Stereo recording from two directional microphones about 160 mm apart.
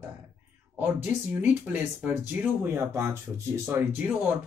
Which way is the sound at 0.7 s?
10° right (ahead or behind).